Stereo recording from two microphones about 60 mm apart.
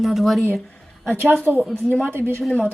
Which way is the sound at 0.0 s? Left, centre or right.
Centre.